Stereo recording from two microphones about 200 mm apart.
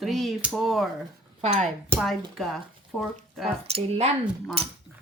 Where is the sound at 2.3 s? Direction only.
Centre (ahead or behind).